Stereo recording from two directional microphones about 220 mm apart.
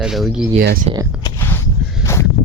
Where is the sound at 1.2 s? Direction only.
10° left (ahead or behind).